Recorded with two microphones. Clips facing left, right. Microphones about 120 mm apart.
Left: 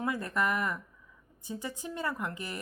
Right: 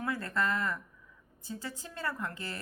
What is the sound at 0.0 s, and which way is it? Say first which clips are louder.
A woman's voice: left 2 dB; 15° left (ahead or behind).